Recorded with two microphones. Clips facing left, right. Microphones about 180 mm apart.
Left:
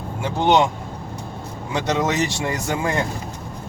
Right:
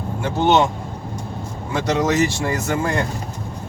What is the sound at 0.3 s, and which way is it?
Speech, 15° left (ahead or behind).